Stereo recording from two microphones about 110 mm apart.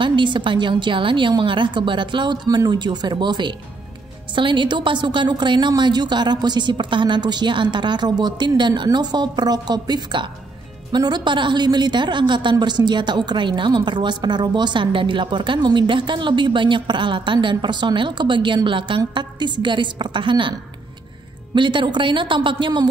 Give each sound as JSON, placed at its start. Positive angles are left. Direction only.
{"t": 0.0, "sound": "a woman's voice", "side_deg": -45}
{"t": 21.5, "sound": "a woman's voice", "side_deg": -45}